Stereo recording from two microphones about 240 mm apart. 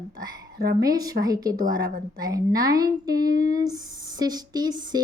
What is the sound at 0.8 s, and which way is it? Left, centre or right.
A woman's voice, centre.